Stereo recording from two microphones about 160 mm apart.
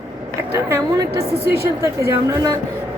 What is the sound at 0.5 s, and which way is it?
A woman's voice, 20° right (ahead or behind).